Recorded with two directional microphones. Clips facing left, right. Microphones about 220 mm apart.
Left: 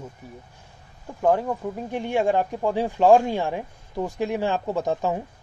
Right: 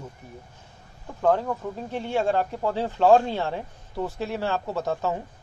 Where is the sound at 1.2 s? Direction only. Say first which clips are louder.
Left 1 dB; 10° left (ahead or behind).